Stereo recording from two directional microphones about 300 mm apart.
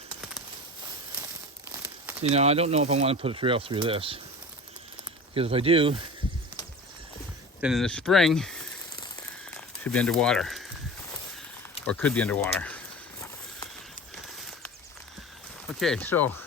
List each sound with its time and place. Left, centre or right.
2.2 s speech: right
5.3 s speech: centre
7.6 s speech: centre
9.6 s speech: centre
11.9 s speech: centre
15.6 s speech: centre